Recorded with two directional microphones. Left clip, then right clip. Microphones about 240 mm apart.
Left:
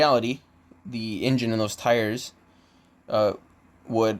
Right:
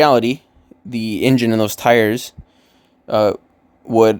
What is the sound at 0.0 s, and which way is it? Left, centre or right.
Speech, right.